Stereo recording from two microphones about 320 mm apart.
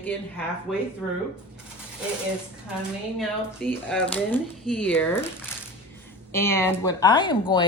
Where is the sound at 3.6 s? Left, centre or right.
Centre.